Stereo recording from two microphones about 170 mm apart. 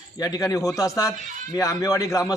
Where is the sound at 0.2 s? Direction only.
20° left (ahead or behind).